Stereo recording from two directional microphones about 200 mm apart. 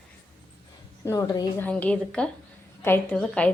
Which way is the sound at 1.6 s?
5° left (ahead or behind).